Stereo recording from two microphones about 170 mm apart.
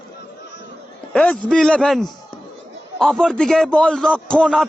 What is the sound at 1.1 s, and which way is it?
A man's voice, 10° left (ahead or behind).